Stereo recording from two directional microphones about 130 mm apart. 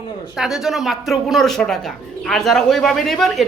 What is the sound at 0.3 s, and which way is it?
Speech, 5° right (ahead or behind).